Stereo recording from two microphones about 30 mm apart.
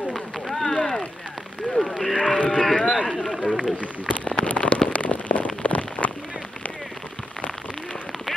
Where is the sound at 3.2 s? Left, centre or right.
Centre.